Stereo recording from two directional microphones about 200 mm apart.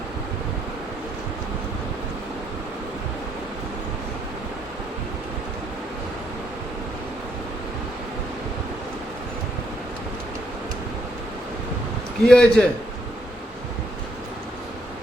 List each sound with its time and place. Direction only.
12.2 s a man's voice: 5° left (ahead or behind)